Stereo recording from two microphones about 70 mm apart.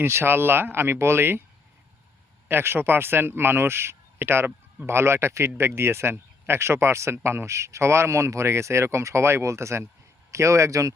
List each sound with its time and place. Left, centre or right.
0.0 s speech: right
2.5 s speech: right